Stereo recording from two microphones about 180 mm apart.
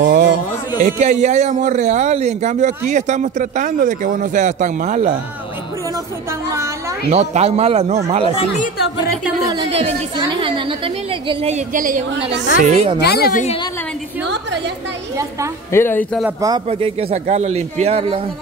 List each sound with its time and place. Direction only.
0.0 s music: 60° right (ahead or behind)
0.8 s a man's voice: 40° right (ahead or behind)
7.1 s a man's voice: 35° right (ahead or behind)
9.5 s a man's voice: 30° right (ahead or behind)
11.7 s a man's voice: 50° right (ahead or behind)
12.6 s a man's voice: 35° right (ahead or behind)
13.0 s speech: 60° left (ahead or behind)
15.7 s speech: 10° left (ahead or behind)
16.3 s a woman's voice: 20° right (ahead or behind)
16.6 s a man's voice: 35° right (ahead or behind)